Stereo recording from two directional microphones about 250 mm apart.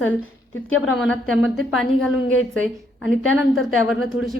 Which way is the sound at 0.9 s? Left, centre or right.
Centre.